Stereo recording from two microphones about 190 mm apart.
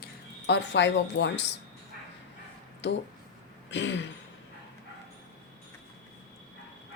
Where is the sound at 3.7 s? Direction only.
70° left (ahead or behind).